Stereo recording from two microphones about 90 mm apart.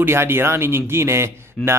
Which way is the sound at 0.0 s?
25° right (ahead or behind).